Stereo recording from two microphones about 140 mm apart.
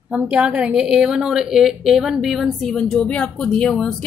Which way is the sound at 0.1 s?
10° right (ahead or behind).